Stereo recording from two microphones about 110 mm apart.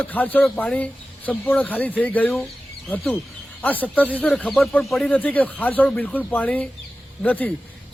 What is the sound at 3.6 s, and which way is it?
Speech, 15° left (ahead or behind).